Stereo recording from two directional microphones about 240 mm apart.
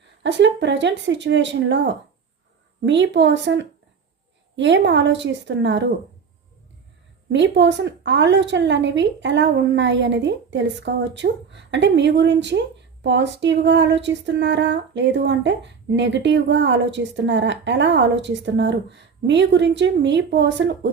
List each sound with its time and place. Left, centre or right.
0.2 s a woman's voice: right
7.3 s a woman's voice: right